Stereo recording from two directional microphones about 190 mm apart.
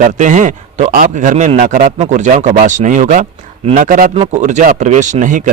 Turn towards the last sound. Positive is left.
turn(degrees=-45)  # may be behind; listen again after turning